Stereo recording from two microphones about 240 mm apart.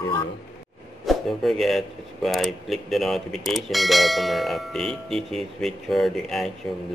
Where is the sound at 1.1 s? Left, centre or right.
Centre.